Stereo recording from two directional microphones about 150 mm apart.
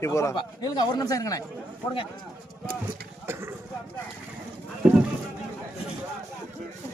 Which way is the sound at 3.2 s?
15° right (ahead or behind).